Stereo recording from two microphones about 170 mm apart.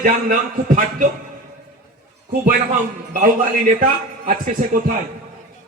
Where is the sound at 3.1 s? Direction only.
50° right (ahead or behind).